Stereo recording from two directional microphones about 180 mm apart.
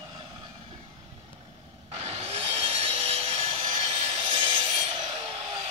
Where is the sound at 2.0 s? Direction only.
35° right (ahead or behind).